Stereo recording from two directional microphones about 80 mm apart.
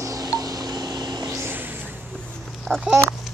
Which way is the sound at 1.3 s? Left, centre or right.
Right.